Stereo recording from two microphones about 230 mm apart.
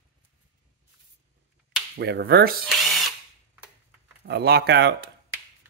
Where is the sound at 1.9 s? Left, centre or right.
Right.